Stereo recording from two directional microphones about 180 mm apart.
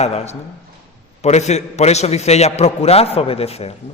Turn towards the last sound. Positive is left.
turn(degrees=35)  # may be behind; listen again after turning